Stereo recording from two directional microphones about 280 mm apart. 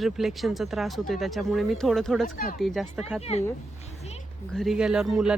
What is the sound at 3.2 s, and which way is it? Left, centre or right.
Speech, left.